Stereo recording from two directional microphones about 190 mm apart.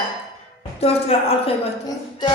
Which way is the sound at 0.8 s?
30° left (ahead or behind).